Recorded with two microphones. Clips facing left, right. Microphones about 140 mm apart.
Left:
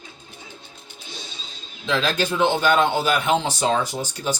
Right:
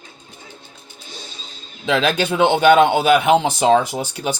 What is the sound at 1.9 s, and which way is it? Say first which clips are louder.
A man's voice: right 4 dB; 70° right (ahead or behind).